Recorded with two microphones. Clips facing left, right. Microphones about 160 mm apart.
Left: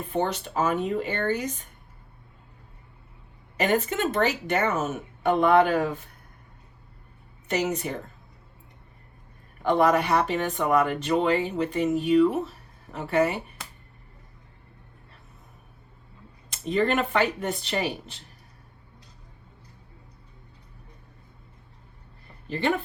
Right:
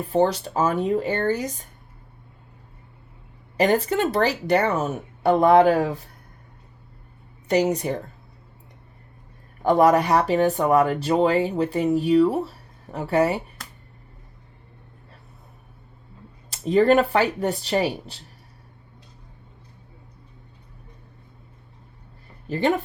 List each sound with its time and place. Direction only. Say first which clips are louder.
0.0 s speech: right 7 dB; 35° right (ahead or behind)
3.6 s speech: right 4 dB; 35° right (ahead or behind)
7.4 s speech: right 6 dB; 35° right (ahead or behind)
9.6 s speech: right 4 dB; 40° right (ahead or behind)
16.5 s speech: right 7 dB; 35° right (ahead or behind)